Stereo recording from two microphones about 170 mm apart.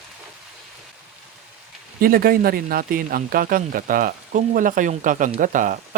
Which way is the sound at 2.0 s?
60° right (ahead or behind).